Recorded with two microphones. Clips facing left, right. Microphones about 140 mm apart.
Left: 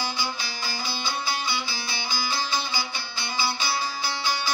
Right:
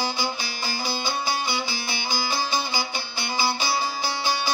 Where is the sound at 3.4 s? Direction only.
15° right (ahead or behind).